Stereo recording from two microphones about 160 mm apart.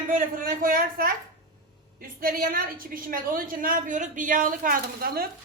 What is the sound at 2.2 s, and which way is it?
A woman's voice, 65° right (ahead or behind).